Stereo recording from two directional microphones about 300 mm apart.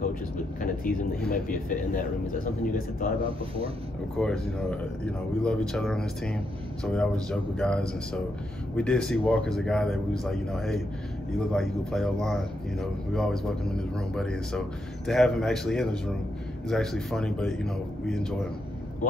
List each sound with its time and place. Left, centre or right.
0.8 s a man's voice: left
4.2 s speech: centre